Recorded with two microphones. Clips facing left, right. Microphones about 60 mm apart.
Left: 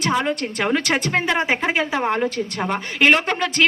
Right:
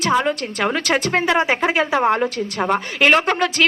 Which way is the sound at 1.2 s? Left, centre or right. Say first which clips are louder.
Right 3 dB; centre.